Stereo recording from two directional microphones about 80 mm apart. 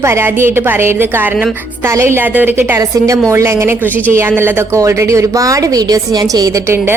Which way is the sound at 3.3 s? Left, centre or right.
Right.